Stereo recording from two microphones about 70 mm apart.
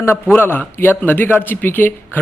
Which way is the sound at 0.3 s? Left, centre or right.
Left.